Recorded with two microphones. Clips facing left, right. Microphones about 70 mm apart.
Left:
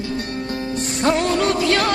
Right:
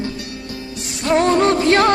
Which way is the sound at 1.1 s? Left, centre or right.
Right.